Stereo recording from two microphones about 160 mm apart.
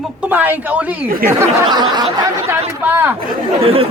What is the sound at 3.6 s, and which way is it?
Speech, 35° right (ahead or behind).